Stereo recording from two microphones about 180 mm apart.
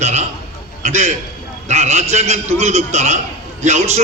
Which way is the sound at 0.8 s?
40° right (ahead or behind).